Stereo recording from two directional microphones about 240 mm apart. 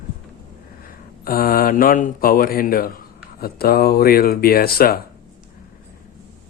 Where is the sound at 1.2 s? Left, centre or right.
Left.